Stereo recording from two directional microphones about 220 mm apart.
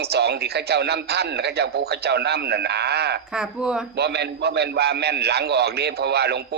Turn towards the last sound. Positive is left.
turn(degrees=-50)  # may be behind; listen again after turning